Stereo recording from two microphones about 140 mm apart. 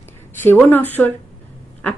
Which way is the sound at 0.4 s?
15° left (ahead or behind).